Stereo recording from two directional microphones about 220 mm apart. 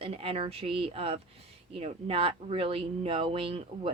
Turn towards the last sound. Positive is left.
turn(degrees=-25)  # may be behind; listen again after turning